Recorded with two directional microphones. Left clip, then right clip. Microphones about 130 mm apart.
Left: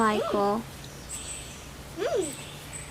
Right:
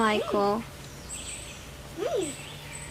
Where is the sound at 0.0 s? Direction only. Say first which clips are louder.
Even; 10° left (ahead or behind).